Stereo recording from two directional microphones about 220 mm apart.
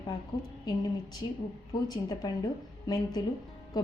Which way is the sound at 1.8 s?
15° left (ahead or behind).